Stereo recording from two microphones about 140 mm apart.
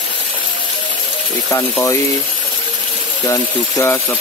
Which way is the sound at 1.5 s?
20° left (ahead or behind).